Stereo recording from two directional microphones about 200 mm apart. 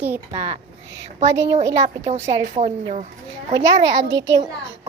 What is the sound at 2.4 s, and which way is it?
Speech, 35° right (ahead or behind).